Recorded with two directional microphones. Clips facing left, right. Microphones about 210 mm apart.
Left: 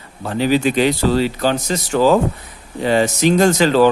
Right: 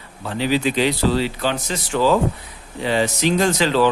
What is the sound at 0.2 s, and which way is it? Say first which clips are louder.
Speech: left 4 dB; 45° left (ahead or behind).